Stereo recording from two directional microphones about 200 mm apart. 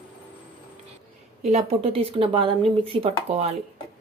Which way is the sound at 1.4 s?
30° right (ahead or behind).